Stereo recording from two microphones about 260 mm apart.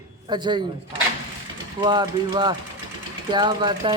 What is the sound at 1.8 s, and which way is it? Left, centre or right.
Speech, centre.